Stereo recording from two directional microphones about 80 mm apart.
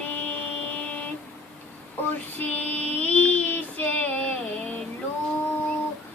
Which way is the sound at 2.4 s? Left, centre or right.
Centre.